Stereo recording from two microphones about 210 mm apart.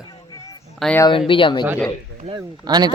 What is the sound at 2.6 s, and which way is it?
Speech, 20° right (ahead or behind).